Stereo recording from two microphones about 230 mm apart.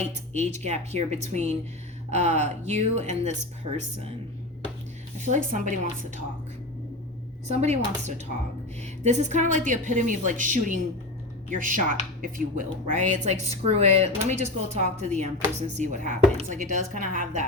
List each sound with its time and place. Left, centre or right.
0.0 s speech: right
5.2 s speech: right
7.4 s speech: right